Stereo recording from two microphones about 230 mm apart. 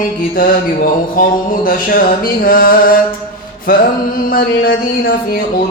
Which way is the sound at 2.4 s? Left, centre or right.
Left.